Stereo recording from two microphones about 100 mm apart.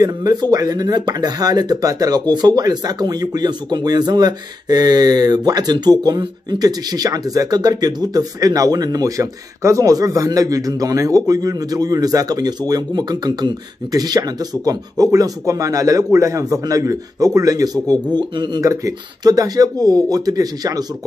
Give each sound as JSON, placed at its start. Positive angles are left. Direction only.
{"t": 0.0, "sound": "speech", "side_deg": -40}
{"t": 18.6, "sound": "speech", "side_deg": -35}